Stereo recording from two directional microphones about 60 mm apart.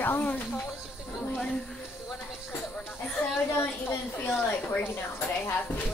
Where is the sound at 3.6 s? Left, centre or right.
Left.